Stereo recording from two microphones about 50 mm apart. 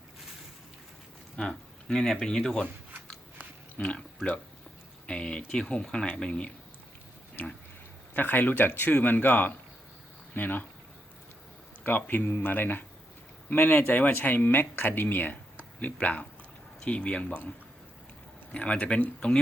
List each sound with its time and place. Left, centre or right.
1.4 s speech: centre
3.8 s speech: left
8.1 s speech: left
8.9 s speech: left
11.8 s speech: left
18.5 s speech: left